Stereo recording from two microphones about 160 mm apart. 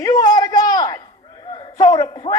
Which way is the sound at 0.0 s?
25° left (ahead or behind).